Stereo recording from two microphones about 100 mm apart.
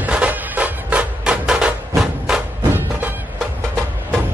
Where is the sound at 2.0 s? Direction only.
5° right (ahead or behind).